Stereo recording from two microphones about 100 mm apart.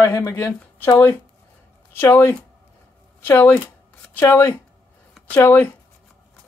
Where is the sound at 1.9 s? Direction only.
20° left (ahead or behind).